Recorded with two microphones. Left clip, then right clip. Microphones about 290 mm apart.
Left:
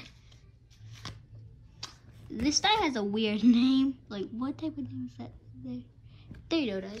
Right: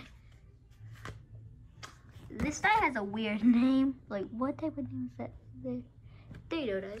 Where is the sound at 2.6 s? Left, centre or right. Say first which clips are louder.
Right 2 dB; centre.